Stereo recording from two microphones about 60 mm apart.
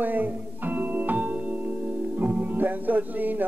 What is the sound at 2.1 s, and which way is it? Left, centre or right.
Music, right.